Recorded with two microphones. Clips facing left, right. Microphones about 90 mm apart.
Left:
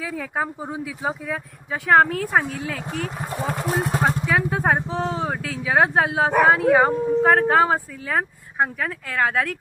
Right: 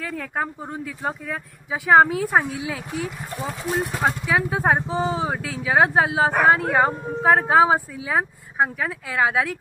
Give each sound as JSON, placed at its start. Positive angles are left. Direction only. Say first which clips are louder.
{"t": 0.0, "sound": "speech", "louder": "left 1 dB", "side_deg": 5}
{"t": 3.2, "sound": "speech", "louder": "left 4 dB", "side_deg": 60}
{"t": 4.4, "sound": "speech", "louder": "even", "side_deg": -5}